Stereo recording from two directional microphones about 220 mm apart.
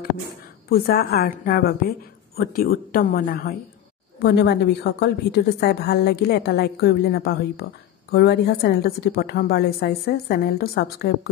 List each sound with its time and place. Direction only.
0.7 s a woman's voice: 45° left (ahead or behind)